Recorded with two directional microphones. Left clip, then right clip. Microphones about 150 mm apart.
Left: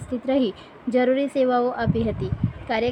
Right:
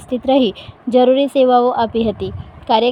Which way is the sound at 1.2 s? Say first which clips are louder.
Right 9 dB; 25° right (ahead or behind).